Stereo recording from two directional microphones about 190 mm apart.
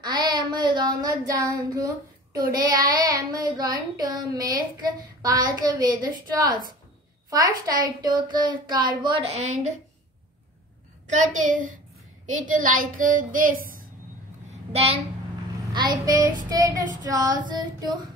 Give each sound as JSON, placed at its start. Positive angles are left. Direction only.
{"t": 0.0, "sound": "child singing", "side_deg": -20}
{"t": 2.3, "sound": "child singing", "side_deg": -20}
{"t": 11.1, "sound": "a woman's voice", "side_deg": -40}
{"t": 14.7, "sound": "a child's voice", "side_deg": -30}
{"t": 15.7, "sound": "child singing", "side_deg": -20}